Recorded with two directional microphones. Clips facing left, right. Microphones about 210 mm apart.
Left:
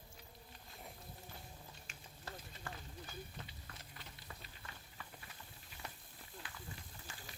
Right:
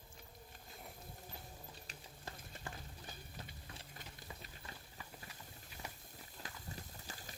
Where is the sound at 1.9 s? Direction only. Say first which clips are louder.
Right 3 dB; 35° right (ahead or behind).